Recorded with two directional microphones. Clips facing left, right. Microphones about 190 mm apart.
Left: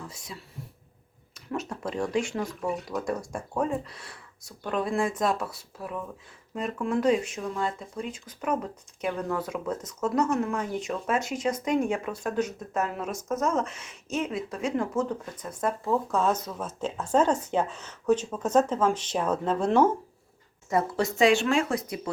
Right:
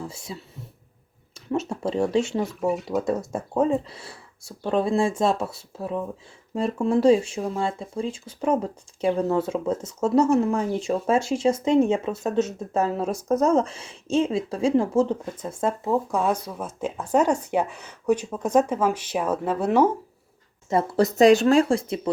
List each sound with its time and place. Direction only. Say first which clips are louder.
0.0 s speech: right 6 dB; 25° right (ahead or behind)
1.5 s speech: right 6 dB; 25° right (ahead or behind)
2.6 s speech: right 7 dB; centre (ahead or behind)
2.9 s speech: right 6 dB; 25° right (ahead or behind); by 19.9 s 10° right (ahead or behind)
20.7 s speech: right 5 dB; 30° right (ahead or behind)